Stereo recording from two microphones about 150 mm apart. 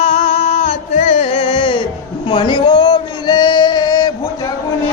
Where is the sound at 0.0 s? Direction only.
50° left (ahead or behind).